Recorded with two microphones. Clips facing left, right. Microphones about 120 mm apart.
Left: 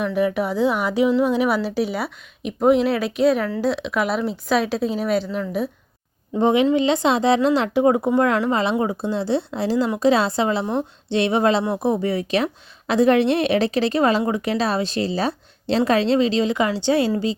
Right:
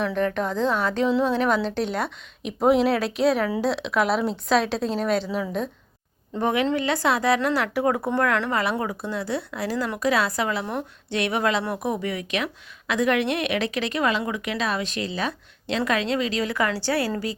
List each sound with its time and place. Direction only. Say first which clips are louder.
0.0 s a woman's voice: left 3 dB; 10° left (ahead or behind)
6.3 s a woman's voice: left 6 dB; 20° left (ahead or behind)